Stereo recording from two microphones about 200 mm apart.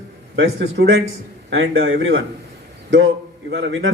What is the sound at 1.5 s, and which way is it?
Speech, 90° right.